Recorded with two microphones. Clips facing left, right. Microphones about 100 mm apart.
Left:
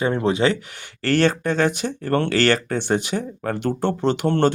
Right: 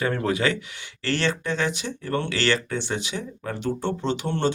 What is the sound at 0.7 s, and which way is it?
Speech, 45° left (ahead or behind).